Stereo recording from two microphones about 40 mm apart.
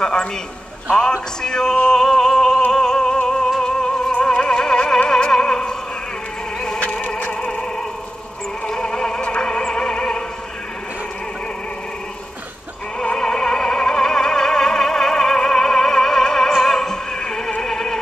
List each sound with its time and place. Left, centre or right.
0.0 s a man's voice: left
1.9 s music: centre
6.8 s a sound: left
8.6 s music: centre
13.0 s opera: centre
17.6 s music: centre